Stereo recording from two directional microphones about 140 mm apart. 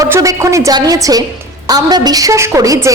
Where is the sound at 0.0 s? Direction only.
25° right (ahead or behind).